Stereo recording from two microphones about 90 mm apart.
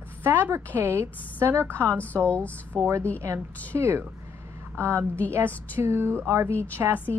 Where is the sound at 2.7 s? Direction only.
30° right (ahead or behind).